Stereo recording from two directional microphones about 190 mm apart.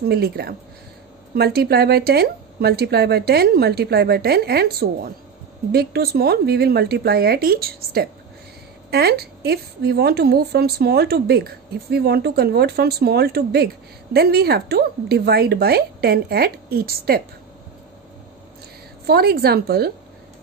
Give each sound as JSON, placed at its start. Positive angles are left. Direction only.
{"t": 0.1, "sound": "a woman's voice", "side_deg": -55}
{"t": 19.0, "sound": "a woman's voice", "side_deg": -55}